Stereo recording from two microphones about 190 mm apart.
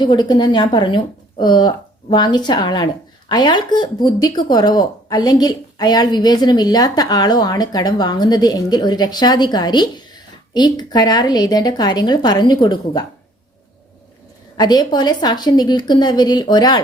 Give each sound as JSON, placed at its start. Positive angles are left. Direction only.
{"t": 0.0, "sound": "speech", "side_deg": 25}
{"t": 14.5, "sound": "speech", "side_deg": 20}